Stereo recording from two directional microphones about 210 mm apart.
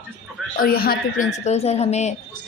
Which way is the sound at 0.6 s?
45° left (ahead or behind).